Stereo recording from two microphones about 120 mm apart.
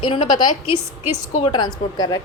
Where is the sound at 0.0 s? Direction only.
45° left (ahead or behind).